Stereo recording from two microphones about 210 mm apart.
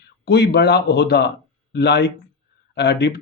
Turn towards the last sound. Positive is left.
turn(degrees=50)  # may be behind; listen again after turning